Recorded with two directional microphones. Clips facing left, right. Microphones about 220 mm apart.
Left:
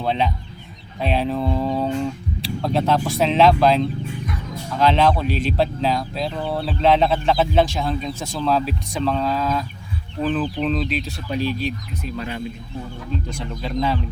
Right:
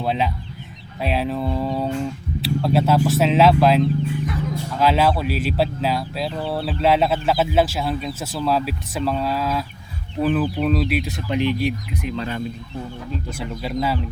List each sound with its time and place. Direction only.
0.0 s speech: 5° right (ahead or behind)
13.3 s speech: 10° right (ahead or behind)